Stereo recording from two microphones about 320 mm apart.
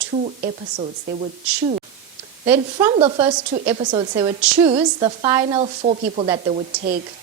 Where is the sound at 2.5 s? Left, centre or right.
Centre.